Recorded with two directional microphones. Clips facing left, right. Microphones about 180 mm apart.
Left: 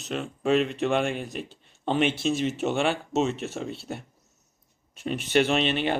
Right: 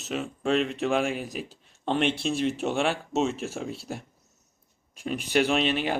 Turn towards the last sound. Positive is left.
turn(degrees=-5)  # may be behind; listen again after turning